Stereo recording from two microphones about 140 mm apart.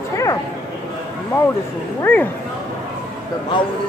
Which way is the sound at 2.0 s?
15° left (ahead or behind).